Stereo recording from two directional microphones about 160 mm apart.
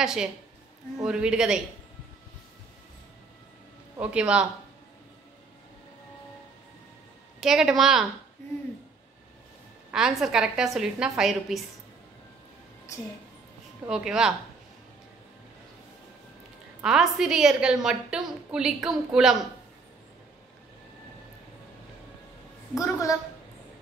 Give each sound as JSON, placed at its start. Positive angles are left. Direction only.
{"t": 0.0, "sound": "a woman's voice", "side_deg": -5}
{"t": 4.0, "sound": "speech", "side_deg": -5}
{"t": 7.3, "sound": "a woman's voice", "side_deg": -5}
{"t": 9.8, "sound": "a woman's voice", "side_deg": -5}
{"t": 13.8, "sound": "a woman's voice", "side_deg": -5}
{"t": 16.8, "sound": "a woman's voice", "side_deg": -5}
{"t": 22.8, "sound": "a woman's voice", "side_deg": 20}